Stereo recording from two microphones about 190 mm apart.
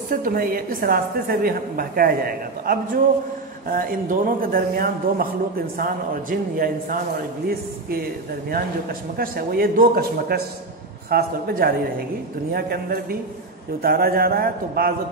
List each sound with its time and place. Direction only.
0.1 s a woman's voice: 45° right (ahead or behind)
9.1 s a woman's voice: 50° right (ahead or behind)